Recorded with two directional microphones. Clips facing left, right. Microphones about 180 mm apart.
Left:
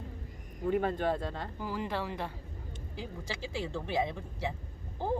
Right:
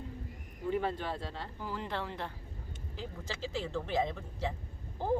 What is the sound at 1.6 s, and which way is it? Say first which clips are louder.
Speech: left 3 dB; 10° left (ahead or behind).